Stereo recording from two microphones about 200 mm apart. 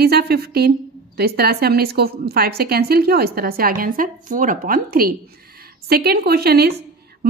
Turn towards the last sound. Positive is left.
turn(degrees=-50)  # may be behind; listen again after turning